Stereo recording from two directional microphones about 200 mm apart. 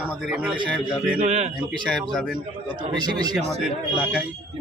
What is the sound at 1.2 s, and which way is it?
Speech, 35° right (ahead or behind).